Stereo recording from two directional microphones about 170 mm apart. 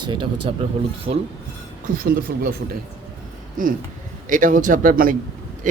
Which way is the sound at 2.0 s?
60° right (ahead or behind).